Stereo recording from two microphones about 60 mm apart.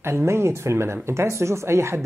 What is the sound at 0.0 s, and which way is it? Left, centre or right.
Speech, right.